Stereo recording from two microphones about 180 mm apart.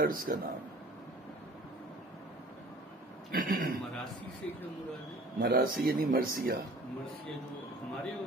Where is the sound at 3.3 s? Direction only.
55° right (ahead or behind).